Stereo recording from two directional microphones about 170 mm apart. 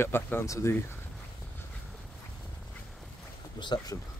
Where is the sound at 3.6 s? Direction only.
25° left (ahead or behind).